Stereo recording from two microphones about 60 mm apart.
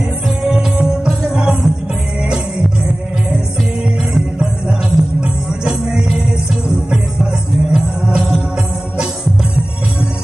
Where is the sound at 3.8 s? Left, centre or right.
Centre.